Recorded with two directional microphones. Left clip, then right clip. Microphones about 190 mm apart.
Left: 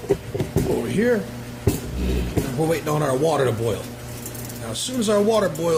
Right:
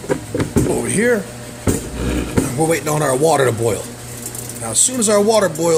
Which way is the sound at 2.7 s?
25° right (ahead or behind).